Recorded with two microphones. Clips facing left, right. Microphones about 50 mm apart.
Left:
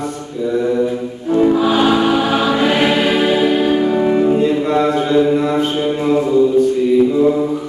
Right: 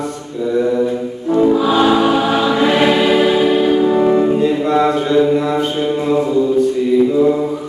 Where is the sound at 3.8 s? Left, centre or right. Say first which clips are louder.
Right 2 dB; centre.